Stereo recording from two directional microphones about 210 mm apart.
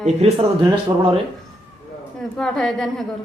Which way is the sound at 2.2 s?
5° left (ahead or behind).